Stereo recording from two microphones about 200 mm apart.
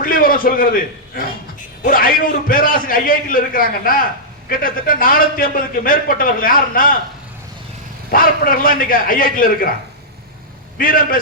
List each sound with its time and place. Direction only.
0.0 s a man's voice: 45° left (ahead or behind)
8.1 s a man's voice: 45° left (ahead or behind)
10.8 s a man's voice: 45° left (ahead or behind)